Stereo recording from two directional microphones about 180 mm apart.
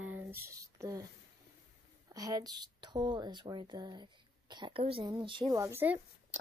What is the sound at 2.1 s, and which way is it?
A woman's voice, 20° right (ahead or behind).